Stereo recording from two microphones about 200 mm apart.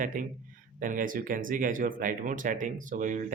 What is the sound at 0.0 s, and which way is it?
Speech, 40° right (ahead or behind).